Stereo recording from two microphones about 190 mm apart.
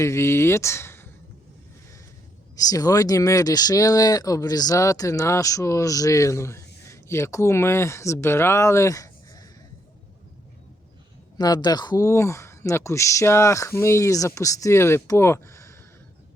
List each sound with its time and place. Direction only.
0.0 s speech: 15° left (ahead or behind)
2.6 s speech: 20° left (ahead or behind)
11.3 s speech: 20° left (ahead or behind)